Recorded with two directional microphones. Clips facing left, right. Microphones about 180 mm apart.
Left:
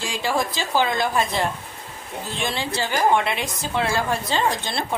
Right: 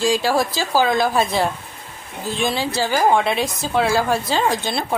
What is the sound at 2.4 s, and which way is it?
Speech, 10° right (ahead or behind).